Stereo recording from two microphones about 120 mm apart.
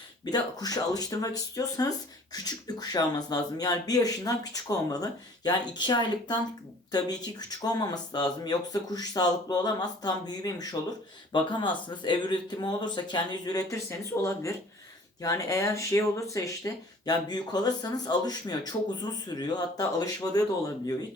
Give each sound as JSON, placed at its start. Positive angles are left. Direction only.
{"t": 0.3, "sound": "speech", "side_deg": 30}